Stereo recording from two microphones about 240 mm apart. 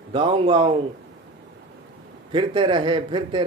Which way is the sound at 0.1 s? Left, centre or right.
Right.